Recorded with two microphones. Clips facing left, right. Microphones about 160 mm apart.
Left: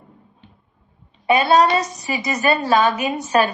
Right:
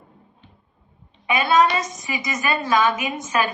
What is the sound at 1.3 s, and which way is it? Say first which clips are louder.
Speech: left 3 dB; 35° left (ahead or behind).